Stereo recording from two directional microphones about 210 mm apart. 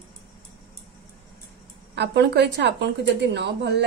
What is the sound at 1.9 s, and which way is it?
A woman's voice, 55° right (ahead or behind).